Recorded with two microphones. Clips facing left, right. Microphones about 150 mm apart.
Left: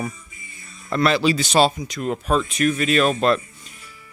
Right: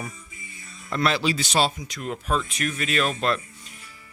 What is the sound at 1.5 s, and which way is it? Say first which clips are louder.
Speech: left 6 dB; 35° left (ahead or behind).